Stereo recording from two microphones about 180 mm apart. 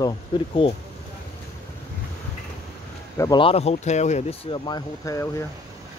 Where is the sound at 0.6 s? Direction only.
30° left (ahead or behind).